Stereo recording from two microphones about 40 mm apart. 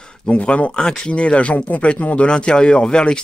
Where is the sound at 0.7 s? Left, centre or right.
Left.